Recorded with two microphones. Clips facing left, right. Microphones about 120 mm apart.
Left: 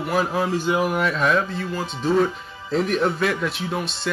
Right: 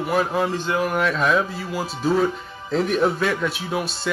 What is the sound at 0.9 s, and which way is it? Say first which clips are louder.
Speech: right 1 dB; centre (ahead or behind).